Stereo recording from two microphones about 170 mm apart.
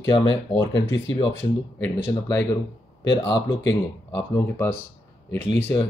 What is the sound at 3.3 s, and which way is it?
Speech, 90° left.